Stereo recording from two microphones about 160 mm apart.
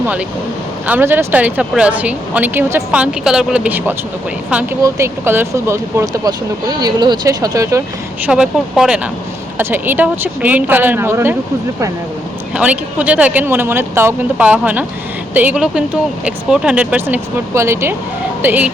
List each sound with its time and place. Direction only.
0.9 s speech: 10° right (ahead or behind)
8.2 s speech: 5° right (ahead or behind)
12.5 s speech: 10° right (ahead or behind)